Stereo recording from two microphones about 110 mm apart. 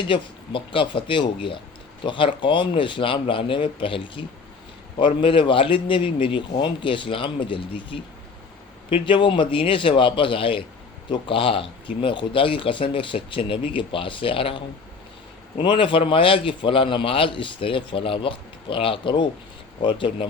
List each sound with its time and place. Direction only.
0.1 s a man's voice: 50° left (ahead or behind)
15.6 s a man's voice: 50° left (ahead or behind)